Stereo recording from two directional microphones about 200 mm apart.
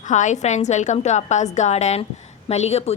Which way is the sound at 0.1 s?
40° left (ahead or behind).